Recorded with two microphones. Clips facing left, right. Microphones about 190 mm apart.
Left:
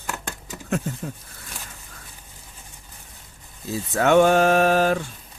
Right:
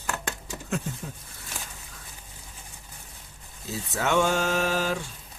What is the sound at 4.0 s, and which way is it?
Mantra, 60° left (ahead or behind).